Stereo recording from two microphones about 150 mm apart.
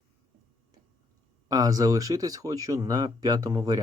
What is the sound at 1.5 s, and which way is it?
Speech, 25° right (ahead or behind).